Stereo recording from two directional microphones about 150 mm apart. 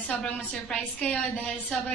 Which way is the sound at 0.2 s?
5° left (ahead or behind).